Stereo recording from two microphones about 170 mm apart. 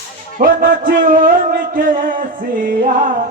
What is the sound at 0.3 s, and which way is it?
Music, 55° right (ahead or behind).